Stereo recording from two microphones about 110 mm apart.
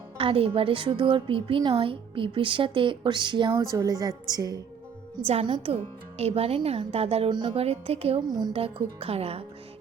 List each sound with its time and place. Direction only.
0.2 s a woman's voice: 60° right (ahead or behind)
3.5 s a woman's voice: 30° right (ahead or behind)
5.2 s a woman's voice: 60° right (ahead or behind)
7.3 s a woman's voice: 45° right (ahead or behind)
7.5 s a woman's voice: 65° right (ahead or behind)
8.3 s a woman's voice: 40° right (ahead or behind)
8.5 s a woman's voice: 60° right (ahead or behind)